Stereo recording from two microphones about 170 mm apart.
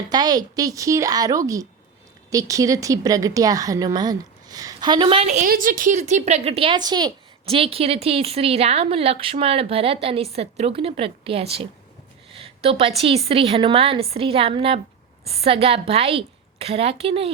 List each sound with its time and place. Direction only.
0.1 s a woman's voice: 25° right (ahead or behind); by 5.5 s 45° right (ahead or behind)
5.5 s a woman's voice: 55° right (ahead or behind); by 11.6 s 35° right (ahead or behind)
12.3 s a sound: 35° right (ahead or behind)
13.0 s a woman's voice: 35° right (ahead or behind)